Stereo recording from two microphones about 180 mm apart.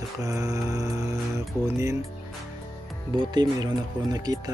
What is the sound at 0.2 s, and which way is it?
Music, 15° right (ahead or behind).